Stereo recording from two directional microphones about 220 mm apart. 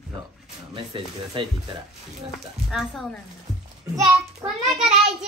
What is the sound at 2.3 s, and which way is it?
Speech, centre (ahead or behind).